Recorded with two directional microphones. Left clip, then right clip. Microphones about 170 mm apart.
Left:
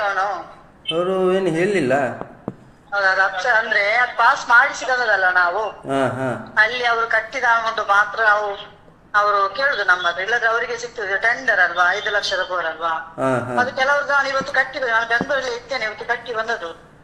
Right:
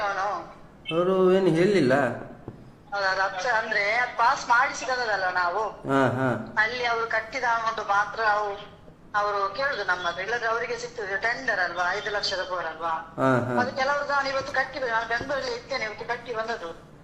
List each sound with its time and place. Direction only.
0.0 s a sound: 30° left (ahead or behind)
0.9 s speech: 20° right (ahead or behind)
2.9 s a woman's voice: 25° left (ahead or behind)
5.9 s speech: 25° right (ahead or behind)
6.5 s a woman's voice: 30° left (ahead or behind)
13.1 s speech: 20° right (ahead or behind)
13.6 s a woman's voice: 35° left (ahead or behind)